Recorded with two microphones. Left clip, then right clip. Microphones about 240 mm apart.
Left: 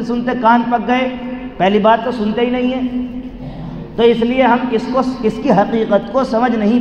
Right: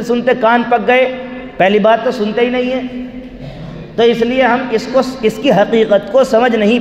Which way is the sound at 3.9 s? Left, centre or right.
Right.